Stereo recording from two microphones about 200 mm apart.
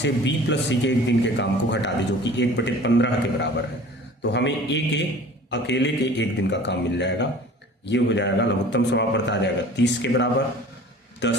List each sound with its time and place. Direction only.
0.0 s a man's voice: 60° left (ahead or behind)